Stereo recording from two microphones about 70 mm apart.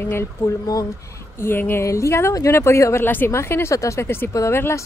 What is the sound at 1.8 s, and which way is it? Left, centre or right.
Speech, left.